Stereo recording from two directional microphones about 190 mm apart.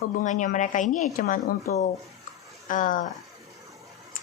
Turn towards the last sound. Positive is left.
turn(degrees=45)  # may be behind; listen again after turning